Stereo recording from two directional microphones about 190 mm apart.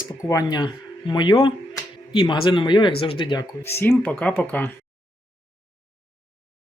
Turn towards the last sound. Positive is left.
turn(degrees=10)  # may be behind; listen again after turning